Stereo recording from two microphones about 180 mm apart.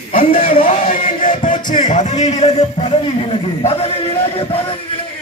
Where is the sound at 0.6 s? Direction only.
45° left (ahead or behind).